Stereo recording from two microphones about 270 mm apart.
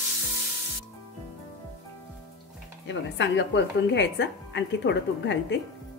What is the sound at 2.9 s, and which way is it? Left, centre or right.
Speech, left.